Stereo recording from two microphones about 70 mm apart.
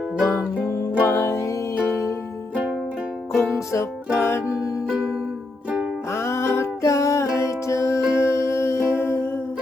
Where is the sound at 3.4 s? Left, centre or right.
Left.